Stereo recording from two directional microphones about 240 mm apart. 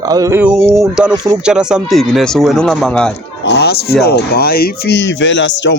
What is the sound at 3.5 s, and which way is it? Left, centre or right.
Speech, left.